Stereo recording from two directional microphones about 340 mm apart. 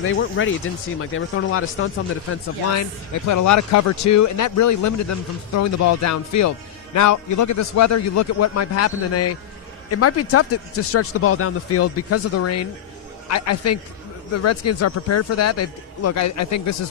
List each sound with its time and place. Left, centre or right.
0.0 s a man's voice: left
2.7 s a man's voice: left